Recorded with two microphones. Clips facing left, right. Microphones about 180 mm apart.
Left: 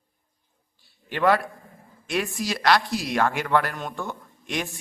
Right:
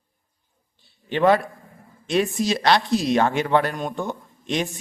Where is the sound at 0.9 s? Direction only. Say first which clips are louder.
Right 3 dB; 20° right (ahead or behind).